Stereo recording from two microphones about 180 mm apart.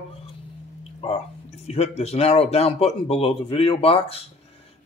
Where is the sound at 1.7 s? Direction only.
35° left (ahead or behind).